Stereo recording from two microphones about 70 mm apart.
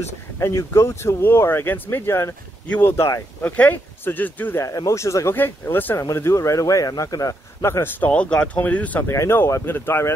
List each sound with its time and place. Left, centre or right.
0.4 s speech: left
3.4 s speech: left
4.6 s speech: left
5.3 s speech: left
6.1 s speech: left
7.6 s speech: left
8.0 s speech: centre
9.0 s speech: left